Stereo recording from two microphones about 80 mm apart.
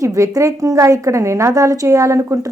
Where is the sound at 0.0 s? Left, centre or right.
Right.